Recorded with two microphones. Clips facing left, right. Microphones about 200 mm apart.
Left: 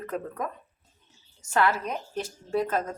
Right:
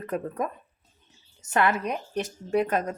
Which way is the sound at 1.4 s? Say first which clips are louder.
Right 1 dB; 20° right (ahead or behind).